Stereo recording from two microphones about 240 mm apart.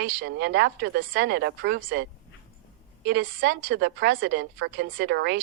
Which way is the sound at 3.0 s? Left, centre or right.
Right.